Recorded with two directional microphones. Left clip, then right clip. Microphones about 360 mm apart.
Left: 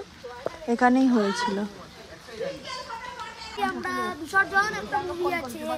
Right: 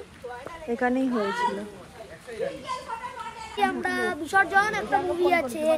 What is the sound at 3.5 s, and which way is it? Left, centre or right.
A child's voice, centre.